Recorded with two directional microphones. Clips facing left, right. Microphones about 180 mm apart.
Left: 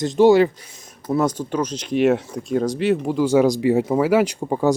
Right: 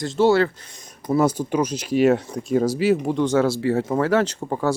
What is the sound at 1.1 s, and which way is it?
Speech, 5° right (ahead or behind).